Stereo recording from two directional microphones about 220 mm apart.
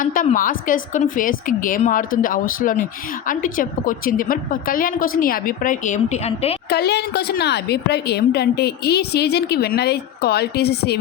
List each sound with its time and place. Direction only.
0.0 s a woman's voice: 40° left (ahead or behind)
6.7 s a woman's voice: 50° left (ahead or behind)